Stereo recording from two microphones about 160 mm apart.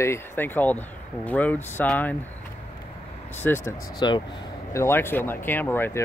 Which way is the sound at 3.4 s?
15° left (ahead or behind).